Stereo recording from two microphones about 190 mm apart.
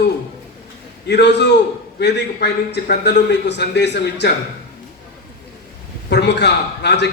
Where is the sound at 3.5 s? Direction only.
65° left (ahead or behind).